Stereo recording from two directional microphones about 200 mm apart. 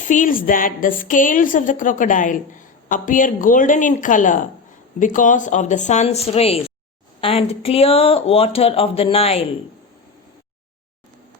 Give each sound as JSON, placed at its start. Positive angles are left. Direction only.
{"t": 0.1, "sound": "a woman's voice", "side_deg": 40}